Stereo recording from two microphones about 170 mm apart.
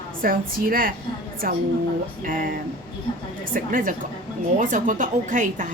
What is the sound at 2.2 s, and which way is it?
Speech, 50° right (ahead or behind).